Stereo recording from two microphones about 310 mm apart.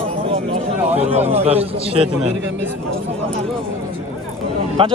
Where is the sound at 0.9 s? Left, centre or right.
Right.